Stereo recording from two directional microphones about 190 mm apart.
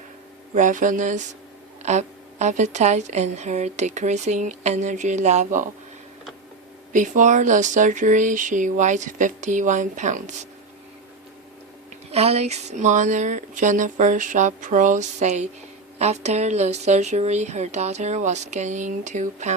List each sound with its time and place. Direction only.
0.5 s a woman's voice: 40° right (ahead or behind)
6.9 s a woman's voice: 40° right (ahead or behind)
11.9 s a woman's voice: 35° right (ahead or behind)